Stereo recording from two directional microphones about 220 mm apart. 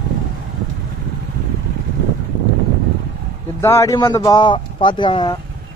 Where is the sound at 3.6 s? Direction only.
10° left (ahead or behind).